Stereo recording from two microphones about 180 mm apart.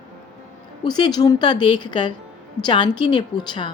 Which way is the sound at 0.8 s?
25° left (ahead or behind).